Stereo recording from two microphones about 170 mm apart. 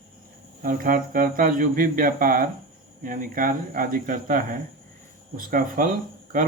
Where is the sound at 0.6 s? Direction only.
55° right (ahead or behind).